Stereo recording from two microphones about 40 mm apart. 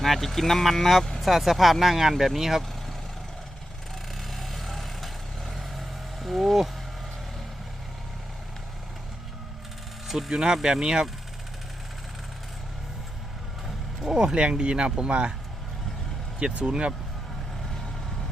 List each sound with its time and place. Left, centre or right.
0.0 s speech: centre
4.2 s vehicle: centre
10.1 s speech: centre
14.0 s speech: centre
16.4 s speech: right